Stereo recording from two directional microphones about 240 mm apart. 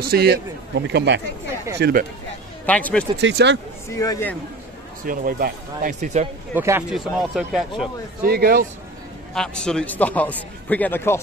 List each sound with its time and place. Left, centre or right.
0.0 s speech: right
2.6 s speech: centre
3.2 s speech: right
3.9 s a man's voice: centre
5.0 s speech: right
6.5 s speech: centre
8.3 s speech: right
9.3 s a man's voice: centre